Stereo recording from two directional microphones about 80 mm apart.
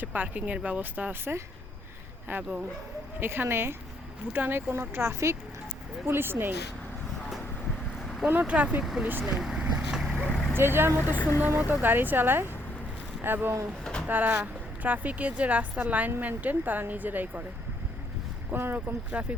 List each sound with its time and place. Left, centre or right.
0.0 s speech: right
8.3 s speech: centre
8.8 s speech: centre
9.2 s vehicle: centre
10.5 s speech: right
11.3 s speech: left
11.8 s speech: right
18.5 s speech: right